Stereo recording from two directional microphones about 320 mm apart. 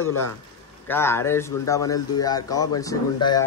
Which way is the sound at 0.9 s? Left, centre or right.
Centre.